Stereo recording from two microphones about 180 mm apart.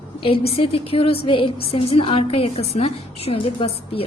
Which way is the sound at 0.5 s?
30° left (ahead or behind).